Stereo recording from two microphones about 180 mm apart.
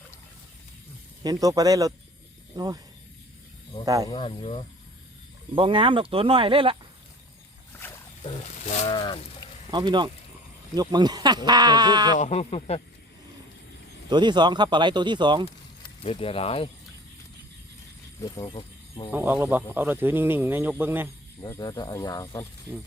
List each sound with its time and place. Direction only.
1.2 s speech: 20° right (ahead or behind)
3.8 s speech: 20° right (ahead or behind)
4.1 s speech: 30° left (ahead or behind)
5.5 s speech: 30° right (ahead or behind)
8.2 s speech: 40° left (ahead or behind)
8.9 s speech: 25° left (ahead or behind)
9.7 s speech: 25° right (ahead or behind)
12.1 s speech: 40° left (ahead or behind)
14.1 s speech: 25° right (ahead or behind)
16.0 s speech: 30° left (ahead or behind)
18.2 s speech: 25° left (ahead or behind)
19.1 s speech: 10° right (ahead or behind)
21.4 s speech: 20° left (ahead or behind)